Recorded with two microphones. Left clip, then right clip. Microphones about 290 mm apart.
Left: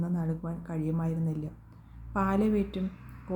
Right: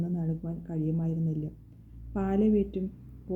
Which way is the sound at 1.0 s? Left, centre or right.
Left.